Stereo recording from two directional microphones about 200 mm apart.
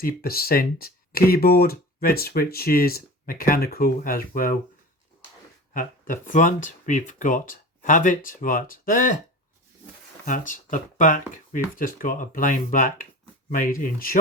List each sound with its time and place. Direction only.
0.0 s speech: 50° left (ahead or behind)
5.7 s speech: 40° left (ahead or behind)
10.2 s speech: 40° left (ahead or behind)